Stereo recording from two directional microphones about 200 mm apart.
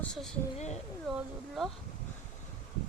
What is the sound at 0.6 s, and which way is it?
Speech, 35° left (ahead or behind).